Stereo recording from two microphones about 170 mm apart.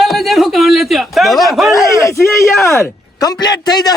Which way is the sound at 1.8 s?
20° left (ahead or behind).